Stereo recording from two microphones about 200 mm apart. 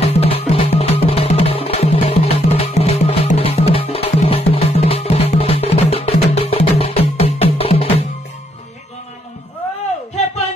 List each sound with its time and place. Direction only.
0.0 s music: 30° left (ahead or behind)